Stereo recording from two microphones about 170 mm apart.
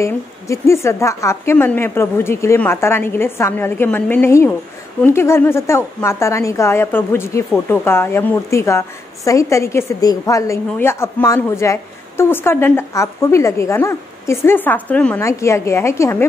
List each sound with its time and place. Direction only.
0.0 s a woman's voice: 15° left (ahead or behind)